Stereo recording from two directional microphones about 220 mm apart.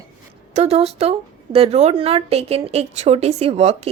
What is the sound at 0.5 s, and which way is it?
A woman's voice, 30° right (ahead or behind).